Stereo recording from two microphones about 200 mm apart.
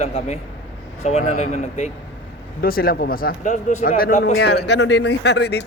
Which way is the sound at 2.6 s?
50° left (ahead or behind).